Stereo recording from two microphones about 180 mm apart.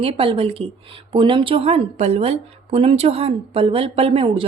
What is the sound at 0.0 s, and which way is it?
A woman's voice, 30° right (ahead or behind).